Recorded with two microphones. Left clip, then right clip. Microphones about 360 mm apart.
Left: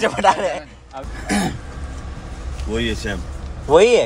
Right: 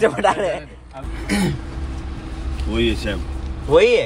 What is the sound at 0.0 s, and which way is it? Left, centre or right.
Speech, centre.